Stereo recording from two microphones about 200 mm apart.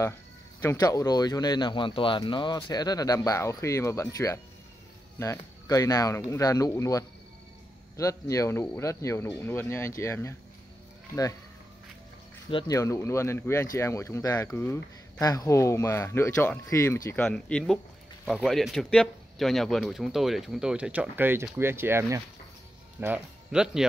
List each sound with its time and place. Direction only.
0.6 s speech: 15° left (ahead or behind)
12.4 s speech: 20° left (ahead or behind); by 23.9 s 5° right (ahead or behind)